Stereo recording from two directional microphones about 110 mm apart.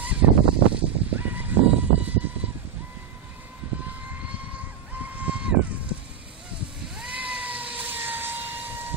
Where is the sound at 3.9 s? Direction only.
15° right (ahead or behind).